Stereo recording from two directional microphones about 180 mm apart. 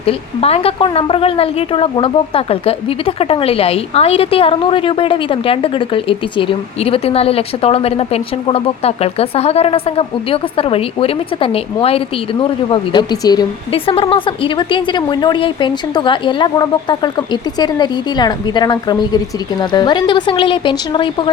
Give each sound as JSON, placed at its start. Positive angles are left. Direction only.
{"t": 0.0, "sound": "speech", "side_deg": 35}